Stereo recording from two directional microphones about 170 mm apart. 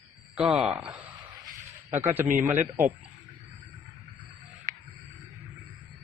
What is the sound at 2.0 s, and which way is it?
Speech, 15° right (ahead or behind).